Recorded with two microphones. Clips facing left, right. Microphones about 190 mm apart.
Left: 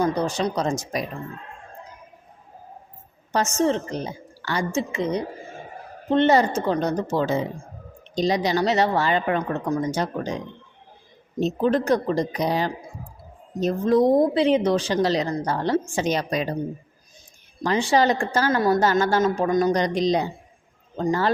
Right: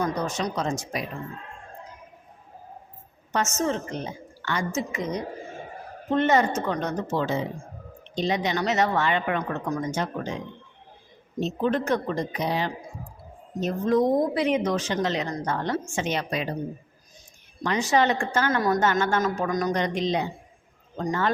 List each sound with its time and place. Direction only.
0.0 s a woman's voice: 30° left (ahead or behind)
3.6 s a woman's voice: 35° left (ahead or behind)
17.6 s a woman's voice: 35° left (ahead or behind)